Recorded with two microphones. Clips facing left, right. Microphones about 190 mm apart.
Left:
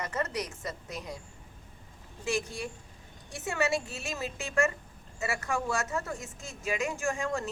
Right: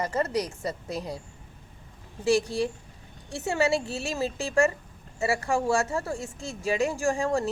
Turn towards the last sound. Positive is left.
turn(degrees=-30)  # may be behind; listen again after turning